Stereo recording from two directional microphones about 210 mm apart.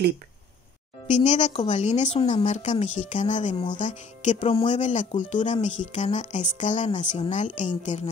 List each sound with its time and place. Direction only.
1.0 s a woman's voice: 35° left (ahead or behind)